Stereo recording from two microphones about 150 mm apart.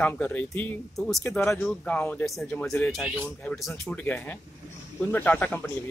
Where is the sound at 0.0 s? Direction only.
10° left (ahead or behind).